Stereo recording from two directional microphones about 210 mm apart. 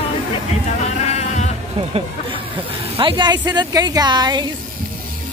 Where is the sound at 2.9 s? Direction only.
20° right (ahead or behind).